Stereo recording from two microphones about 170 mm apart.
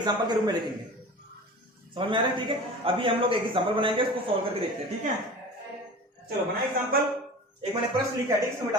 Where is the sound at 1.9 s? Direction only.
30° right (ahead or behind).